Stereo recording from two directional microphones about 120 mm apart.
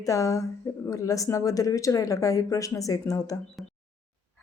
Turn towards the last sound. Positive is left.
turn(degrees=30)  # may be behind; listen again after turning